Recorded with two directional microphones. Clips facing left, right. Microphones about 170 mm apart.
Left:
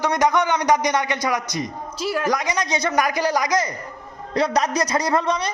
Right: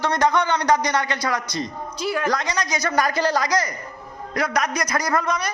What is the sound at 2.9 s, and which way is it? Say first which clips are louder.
A man's voice: right 1 dB; 15° left (ahead or behind).